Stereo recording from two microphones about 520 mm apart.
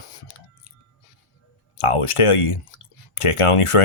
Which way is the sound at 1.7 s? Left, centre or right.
Left.